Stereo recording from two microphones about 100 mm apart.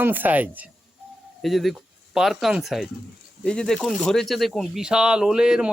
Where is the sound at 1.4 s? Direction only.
Centre (ahead or behind).